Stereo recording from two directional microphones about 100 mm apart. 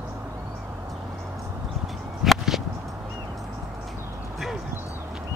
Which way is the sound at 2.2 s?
5° right (ahead or behind).